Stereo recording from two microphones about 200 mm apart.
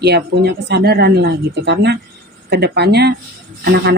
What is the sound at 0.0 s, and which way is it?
A woman's voice, 55° right (ahead or behind).